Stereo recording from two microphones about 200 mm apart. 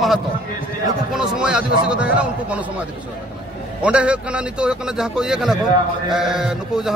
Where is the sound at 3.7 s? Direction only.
5° right (ahead or behind).